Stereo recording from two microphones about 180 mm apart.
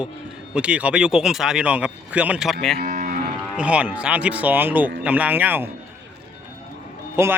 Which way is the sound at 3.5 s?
5° right (ahead or behind).